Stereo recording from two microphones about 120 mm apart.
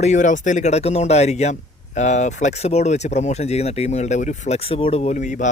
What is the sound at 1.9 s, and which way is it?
Speech, 80° left.